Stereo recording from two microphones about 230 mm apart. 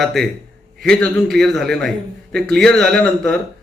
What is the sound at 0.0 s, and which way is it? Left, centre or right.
A man's voice, centre.